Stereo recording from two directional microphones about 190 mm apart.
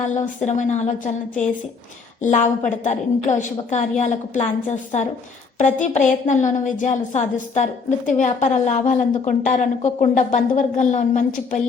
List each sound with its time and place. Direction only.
0.0 s a woman's voice: 40° left (ahead or behind)
2.2 s a woman's voice: 40° left (ahead or behind)